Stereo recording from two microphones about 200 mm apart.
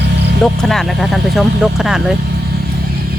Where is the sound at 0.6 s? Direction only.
Centre (ahead or behind).